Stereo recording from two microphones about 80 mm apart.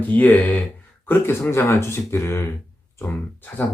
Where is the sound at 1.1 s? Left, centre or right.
Left.